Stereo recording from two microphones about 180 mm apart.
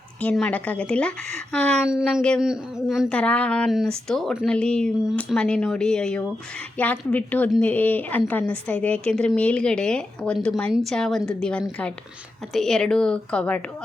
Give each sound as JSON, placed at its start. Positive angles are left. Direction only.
{"t": 0.2, "sound": "a woman's voice", "side_deg": 5}